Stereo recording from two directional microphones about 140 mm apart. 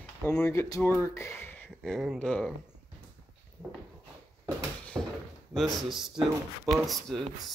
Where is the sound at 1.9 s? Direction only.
5° left (ahead or behind).